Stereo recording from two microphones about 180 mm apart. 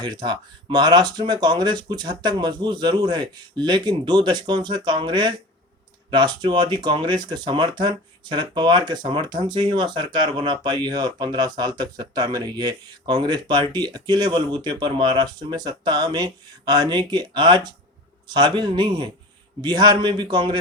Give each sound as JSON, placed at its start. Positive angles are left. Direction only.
{"t": 0.0, "sound": "speech", "side_deg": -25}